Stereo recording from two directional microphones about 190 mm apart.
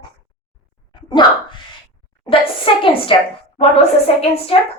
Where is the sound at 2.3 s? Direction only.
25° left (ahead or behind).